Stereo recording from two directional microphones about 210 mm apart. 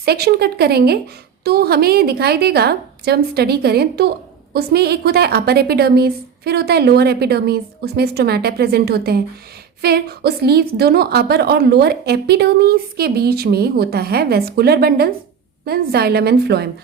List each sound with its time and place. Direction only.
0.0 s a woman's voice: 50° right (ahead or behind)